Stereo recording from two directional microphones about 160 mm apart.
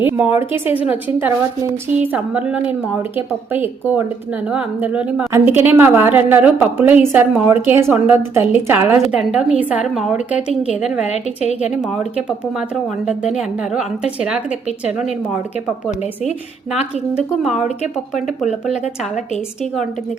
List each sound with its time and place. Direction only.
0.0 s a woman's voice: 10° right (ahead or behind)
2.0 s a woman's voice: 10° right (ahead or behind)
11.0 s a woman's voice: 45° left (ahead or behind)
13.7 s a woman's voice: 5° right (ahead or behind)